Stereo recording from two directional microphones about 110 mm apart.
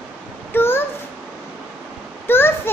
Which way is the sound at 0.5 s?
20° left (ahead or behind).